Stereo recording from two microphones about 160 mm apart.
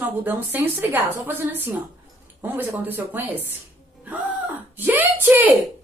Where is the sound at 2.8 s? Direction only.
10° right (ahead or behind).